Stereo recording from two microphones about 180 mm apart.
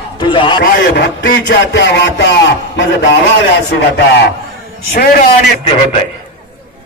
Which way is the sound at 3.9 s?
65° left (ahead or behind).